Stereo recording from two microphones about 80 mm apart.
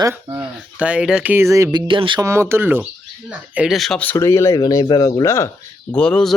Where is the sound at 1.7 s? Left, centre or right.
Right.